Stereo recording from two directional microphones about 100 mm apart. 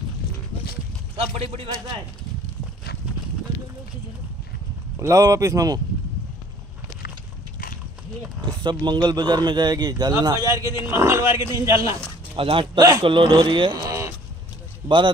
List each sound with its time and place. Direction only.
1.1 s a man's voice: 70° right (ahead or behind)
4.9 s speech: 30° right (ahead or behind)
8.4 s speech: 50° right (ahead or behind); by 12.0 s 30° right (ahead or behind)
12.4 s a man's voice: 65° right (ahead or behind)
12.7 s speech: 40° right (ahead or behind)
13.0 s speech: 60° right (ahead or behind)
13.8 s a sound: 30° right (ahead or behind)
14.8 s speech: 20° right (ahead or behind)